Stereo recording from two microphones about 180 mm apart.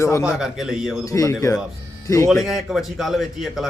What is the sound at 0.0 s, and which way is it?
Speech, 15° left (ahead or behind).